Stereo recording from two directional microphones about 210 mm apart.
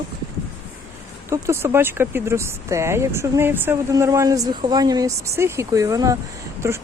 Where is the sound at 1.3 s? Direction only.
10° right (ahead or behind).